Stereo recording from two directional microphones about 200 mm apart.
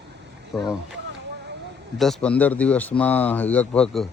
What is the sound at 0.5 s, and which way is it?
Speech, centre (ahead or behind).